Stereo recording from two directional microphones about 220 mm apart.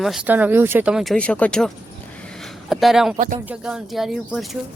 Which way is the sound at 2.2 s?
5° left (ahead or behind).